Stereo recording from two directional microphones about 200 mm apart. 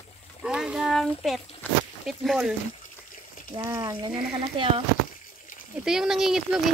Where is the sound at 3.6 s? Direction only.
15° right (ahead or behind).